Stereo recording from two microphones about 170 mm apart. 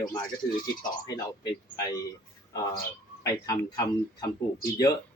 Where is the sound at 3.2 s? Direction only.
20° left (ahead or behind).